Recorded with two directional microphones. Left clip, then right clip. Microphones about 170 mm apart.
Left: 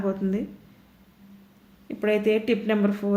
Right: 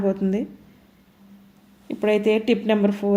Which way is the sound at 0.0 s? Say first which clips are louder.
Right 4 dB; 25° right (ahead or behind).